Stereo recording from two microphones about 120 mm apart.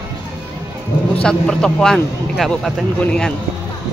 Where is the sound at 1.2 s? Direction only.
5° left (ahead or behind).